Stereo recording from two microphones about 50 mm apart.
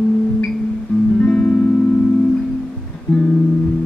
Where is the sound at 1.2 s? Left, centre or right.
Left.